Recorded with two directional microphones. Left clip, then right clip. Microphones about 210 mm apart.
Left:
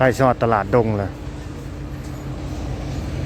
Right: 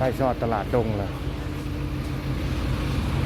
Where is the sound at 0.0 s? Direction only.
40° left (ahead or behind).